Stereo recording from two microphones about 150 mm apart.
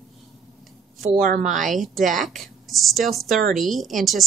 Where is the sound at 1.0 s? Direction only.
70° right (ahead or behind).